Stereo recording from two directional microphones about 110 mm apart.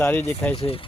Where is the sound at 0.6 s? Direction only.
55° left (ahead or behind).